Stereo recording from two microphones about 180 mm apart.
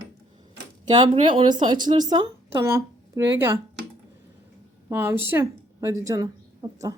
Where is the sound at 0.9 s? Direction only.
25° right (ahead or behind).